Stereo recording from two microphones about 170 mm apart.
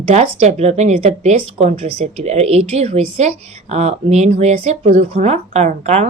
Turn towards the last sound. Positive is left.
turn(degrees=-40)  # may be behind; listen again after turning